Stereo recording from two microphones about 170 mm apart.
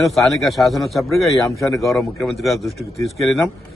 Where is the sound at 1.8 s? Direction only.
Centre (ahead or behind).